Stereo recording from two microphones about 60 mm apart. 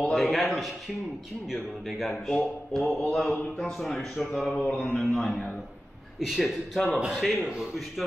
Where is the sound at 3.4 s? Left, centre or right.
Centre.